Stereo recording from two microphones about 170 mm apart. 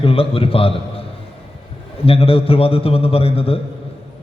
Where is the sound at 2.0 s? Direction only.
35° left (ahead or behind).